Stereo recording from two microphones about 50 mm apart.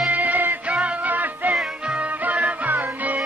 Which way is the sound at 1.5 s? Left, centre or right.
Right.